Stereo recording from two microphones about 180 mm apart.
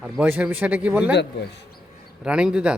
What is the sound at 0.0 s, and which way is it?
A man's voice, 5° right (ahead or behind).